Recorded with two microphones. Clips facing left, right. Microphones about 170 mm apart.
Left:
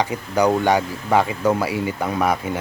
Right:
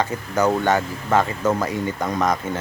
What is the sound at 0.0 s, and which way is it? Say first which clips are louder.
Speech: left 1 dB; 15° left (ahead or behind).